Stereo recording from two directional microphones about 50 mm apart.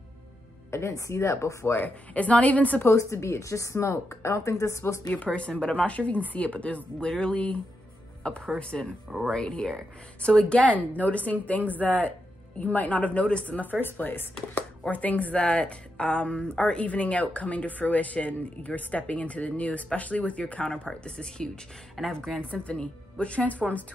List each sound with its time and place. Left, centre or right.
0.7 s a woman's voice: left
2.1 s a woman's voice: left
2.9 s a woman's voice: left
5.1 s a woman's voice: left
15.3 s a woman's voice: centre
22.5 s a woman's voice: left